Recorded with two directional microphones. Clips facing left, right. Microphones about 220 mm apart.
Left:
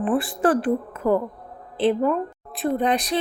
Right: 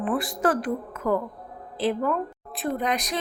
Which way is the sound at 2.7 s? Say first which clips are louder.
Left 6 dB; 30° left (ahead or behind).